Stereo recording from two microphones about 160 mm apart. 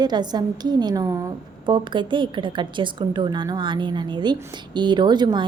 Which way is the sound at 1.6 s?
30° right (ahead or behind).